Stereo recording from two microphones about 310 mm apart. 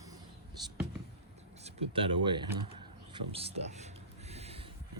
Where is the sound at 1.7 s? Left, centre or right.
Centre.